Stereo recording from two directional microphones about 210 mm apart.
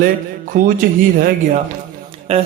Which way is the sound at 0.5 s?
40° right (ahead or behind).